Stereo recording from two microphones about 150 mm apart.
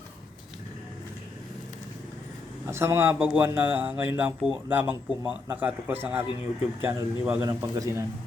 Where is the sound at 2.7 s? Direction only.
20° right (ahead or behind).